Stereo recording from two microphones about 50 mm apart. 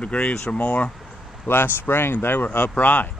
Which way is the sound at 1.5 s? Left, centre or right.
Left.